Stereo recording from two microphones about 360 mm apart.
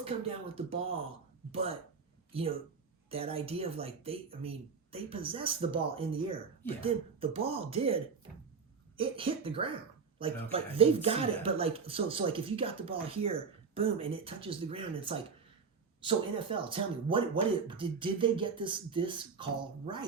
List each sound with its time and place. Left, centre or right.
0.0 s speech: centre
2.3 s speech: centre